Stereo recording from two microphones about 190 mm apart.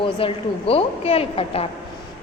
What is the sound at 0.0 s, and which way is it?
A woman's voice, 30° left (ahead or behind).